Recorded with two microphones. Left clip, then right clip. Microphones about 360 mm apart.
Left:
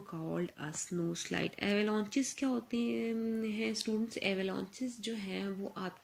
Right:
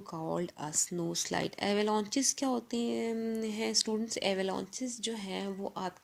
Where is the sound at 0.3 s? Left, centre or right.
Centre.